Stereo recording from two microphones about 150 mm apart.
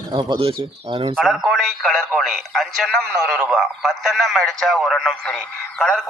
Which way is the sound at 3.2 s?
Centre (ahead or behind).